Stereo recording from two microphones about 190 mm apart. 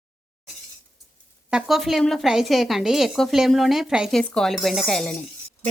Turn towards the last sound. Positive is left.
turn(degrees=5)  # may be behind; listen again after turning